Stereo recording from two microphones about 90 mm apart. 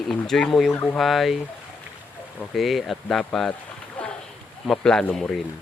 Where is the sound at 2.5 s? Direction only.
Centre (ahead or behind).